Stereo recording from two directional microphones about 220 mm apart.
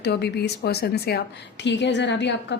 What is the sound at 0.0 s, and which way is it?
A woman's voice, 50° left (ahead or behind).